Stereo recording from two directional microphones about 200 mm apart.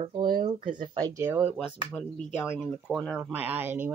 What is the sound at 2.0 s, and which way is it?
A woman's voice, 10° left (ahead or behind).